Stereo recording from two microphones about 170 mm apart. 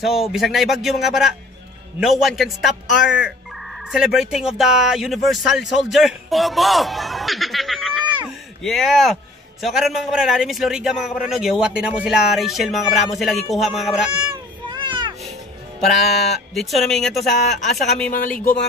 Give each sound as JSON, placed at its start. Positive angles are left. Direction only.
{"t": 0.3, "sound": "a man's voice", "side_deg": 0}
{"t": 3.9, "sound": "a man's voice", "side_deg": -5}
{"t": 14.8, "sound": "music", "side_deg": -25}
{"t": 16.0, "sound": "a man's voice", "side_deg": 0}
{"t": 18.1, "sound": "speech", "side_deg": 55}